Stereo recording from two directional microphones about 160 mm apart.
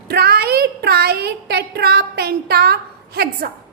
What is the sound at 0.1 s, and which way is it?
Speech, 80° right.